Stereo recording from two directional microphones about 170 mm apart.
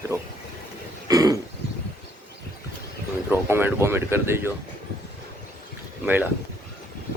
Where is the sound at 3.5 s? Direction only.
15° right (ahead or behind).